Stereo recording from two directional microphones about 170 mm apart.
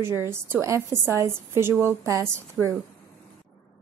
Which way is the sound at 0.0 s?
15° right (ahead or behind).